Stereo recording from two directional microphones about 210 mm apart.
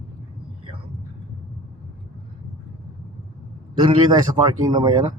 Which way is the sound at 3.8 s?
20° right (ahead or behind).